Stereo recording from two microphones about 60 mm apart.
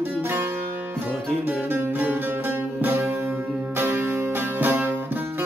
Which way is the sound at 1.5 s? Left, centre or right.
Right.